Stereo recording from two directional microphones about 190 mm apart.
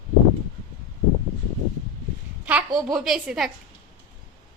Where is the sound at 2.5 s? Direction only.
5° right (ahead or behind).